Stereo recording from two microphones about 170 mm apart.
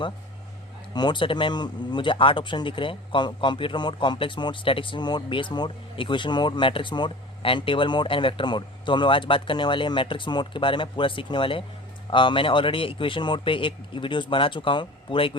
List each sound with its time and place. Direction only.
0.9 s a man's voice: 25° left (ahead or behind)